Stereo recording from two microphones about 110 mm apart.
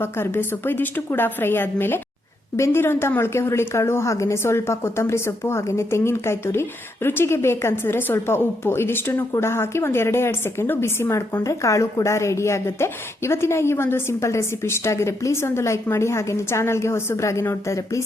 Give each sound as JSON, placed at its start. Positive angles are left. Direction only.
{"t": 0.0, "sound": "a woman's voice", "side_deg": 20}